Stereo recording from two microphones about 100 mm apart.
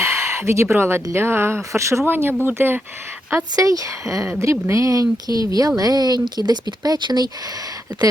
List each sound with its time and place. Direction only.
0.0 s speech: 30° right (ahead or behind)
3.5 s speech: 35° right (ahead or behind)